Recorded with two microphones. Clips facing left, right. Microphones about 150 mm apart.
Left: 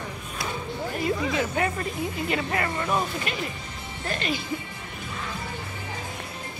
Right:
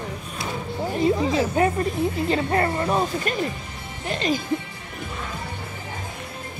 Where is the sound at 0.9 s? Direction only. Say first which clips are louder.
Right 6 dB; 30° right (ahead or behind).